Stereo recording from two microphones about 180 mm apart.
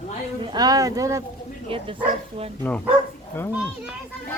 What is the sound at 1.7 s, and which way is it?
Speech, 30° right (ahead or behind).